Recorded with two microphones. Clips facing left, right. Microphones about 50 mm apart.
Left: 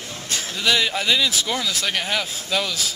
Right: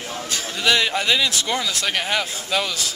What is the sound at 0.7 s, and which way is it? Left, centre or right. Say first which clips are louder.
Speech: right 1 dB; centre.